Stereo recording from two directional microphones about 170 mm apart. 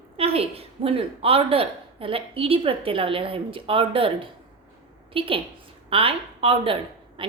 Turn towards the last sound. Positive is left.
turn(degrees=-30)  # may be behind; listen again after turning